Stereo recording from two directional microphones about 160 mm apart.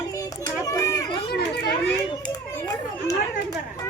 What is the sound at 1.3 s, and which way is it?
Children playing, 80° left.